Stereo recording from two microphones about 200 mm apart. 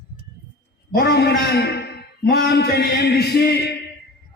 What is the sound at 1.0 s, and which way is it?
A man's voice, 55° left (ahead or behind).